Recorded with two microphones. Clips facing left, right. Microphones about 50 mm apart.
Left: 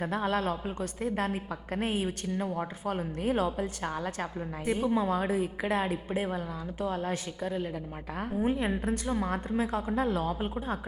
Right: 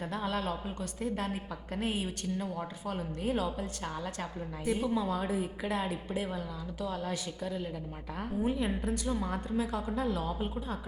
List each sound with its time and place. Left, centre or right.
0.0 s a woman's voice: left
8.1 s a woman's voice: centre
8.4 s a woman's voice: left